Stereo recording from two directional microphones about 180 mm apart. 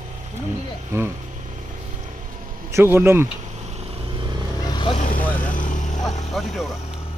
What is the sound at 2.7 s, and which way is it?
Speech, 15° right (ahead or behind).